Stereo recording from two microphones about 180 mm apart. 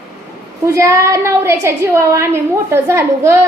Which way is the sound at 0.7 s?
15° right (ahead or behind).